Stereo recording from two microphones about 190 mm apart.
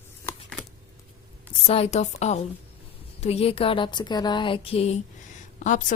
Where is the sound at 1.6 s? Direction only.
30° left (ahead or behind).